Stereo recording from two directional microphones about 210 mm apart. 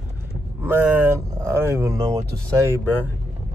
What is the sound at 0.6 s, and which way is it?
Speech, 10° right (ahead or behind).